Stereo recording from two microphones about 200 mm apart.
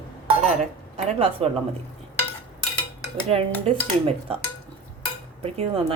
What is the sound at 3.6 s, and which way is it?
Speech, 30° right (ahead or behind).